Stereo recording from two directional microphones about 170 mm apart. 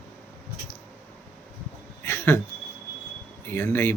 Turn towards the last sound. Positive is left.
turn(degrees=10)  # may be behind; listen again after turning